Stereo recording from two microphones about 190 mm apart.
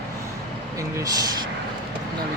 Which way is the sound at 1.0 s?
20° right (ahead or behind).